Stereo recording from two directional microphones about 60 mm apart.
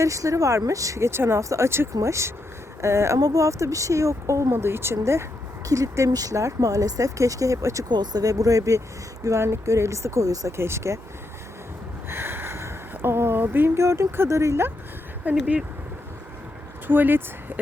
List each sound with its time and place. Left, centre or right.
0.0 s speech: right
1.4 s speech: right
3.2 s speech: right
4.5 s speech: right
5.6 s speech: right
9.2 s speech: right
10.6 s speech: right
12.0 s a sound: right
12.9 s speech: right
13.7 s speech: right
15.3 s speech: right
16.8 s speech: right